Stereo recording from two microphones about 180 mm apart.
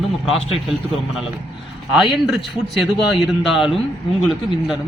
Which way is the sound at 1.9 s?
Centre (ahead or behind).